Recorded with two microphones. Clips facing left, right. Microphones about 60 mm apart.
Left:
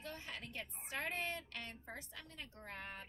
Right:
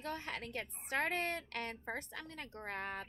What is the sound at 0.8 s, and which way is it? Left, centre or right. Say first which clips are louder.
A woman's voice: right 6 dB; right.